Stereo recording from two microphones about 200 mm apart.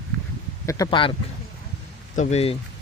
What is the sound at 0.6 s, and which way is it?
Speech, 15° left (ahead or behind).